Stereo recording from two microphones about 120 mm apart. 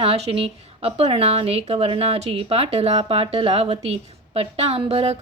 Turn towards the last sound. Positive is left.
turn(degrees=-55)  # may be behind; listen again after turning